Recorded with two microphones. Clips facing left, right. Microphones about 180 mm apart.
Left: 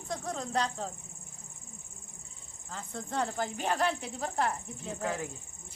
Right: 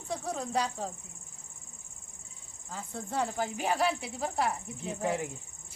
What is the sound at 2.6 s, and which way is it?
A man's voice, 5° right (ahead or behind).